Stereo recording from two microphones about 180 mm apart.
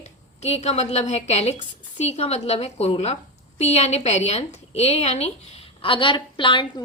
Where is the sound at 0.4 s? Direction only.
35° left (ahead or behind).